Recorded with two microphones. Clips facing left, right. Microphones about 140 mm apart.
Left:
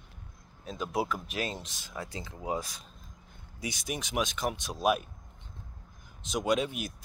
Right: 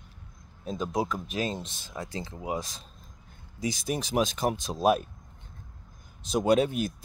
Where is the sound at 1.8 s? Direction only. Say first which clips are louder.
Right 3 dB; 25° right (ahead or behind).